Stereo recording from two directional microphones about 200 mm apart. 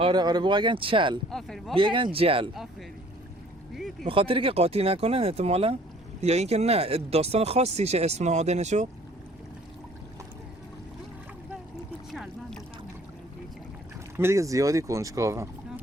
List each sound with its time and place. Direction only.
0.0 s speech: 20° right (ahead or behind)
1.3 s speech: centre (ahead or behind)
1.7 s speech: 25° right (ahead or behind)
4.0 s speech: 25° right (ahead or behind)
12.1 s boat: centre (ahead or behind)
14.2 s speech: 15° right (ahead or behind)